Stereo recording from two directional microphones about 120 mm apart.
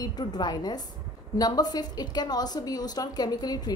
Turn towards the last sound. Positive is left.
turn(degrees=35)  # may be behind; listen again after turning